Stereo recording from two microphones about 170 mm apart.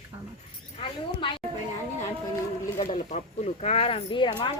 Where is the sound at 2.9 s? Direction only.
45° left (ahead or behind).